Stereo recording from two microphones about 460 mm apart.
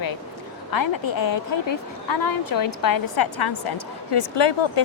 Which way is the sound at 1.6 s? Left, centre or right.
Left.